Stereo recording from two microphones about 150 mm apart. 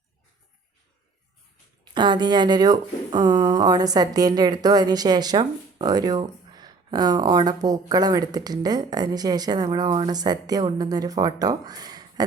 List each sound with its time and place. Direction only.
1.8 s speech: 30° right (ahead or behind)